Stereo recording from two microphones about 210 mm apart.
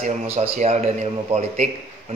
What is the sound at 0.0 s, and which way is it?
Speech, 30° right (ahead or behind).